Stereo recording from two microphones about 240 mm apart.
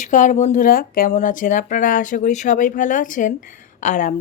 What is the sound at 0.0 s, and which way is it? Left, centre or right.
A woman's voice, left.